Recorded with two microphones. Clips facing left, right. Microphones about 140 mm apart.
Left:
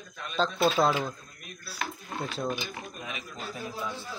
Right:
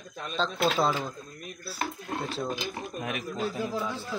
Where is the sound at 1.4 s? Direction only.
35° right (ahead or behind).